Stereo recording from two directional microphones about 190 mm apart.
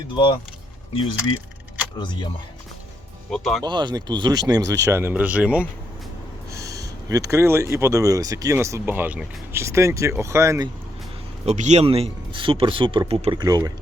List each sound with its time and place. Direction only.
2.0 s speech: 25° left (ahead or behind)
3.2 s speech: centre (ahead or behind)
3.6 s speech: 25° right (ahead or behind); by 5.6 s 5° right (ahead or behind)
6.5 s speech: 15° right (ahead or behind)
11.4 s speech: 40° right (ahead or behind); by 13.7 s 20° right (ahead or behind)